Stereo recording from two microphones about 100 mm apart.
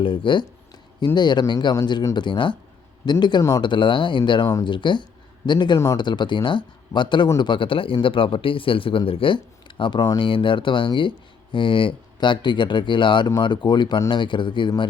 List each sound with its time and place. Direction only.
0.0 s speech: 60° left (ahead or behind)